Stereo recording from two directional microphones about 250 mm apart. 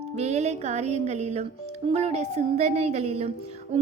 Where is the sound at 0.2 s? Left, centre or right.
Right.